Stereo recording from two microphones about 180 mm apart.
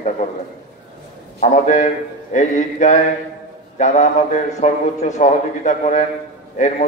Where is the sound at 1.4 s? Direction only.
40° left (ahead or behind).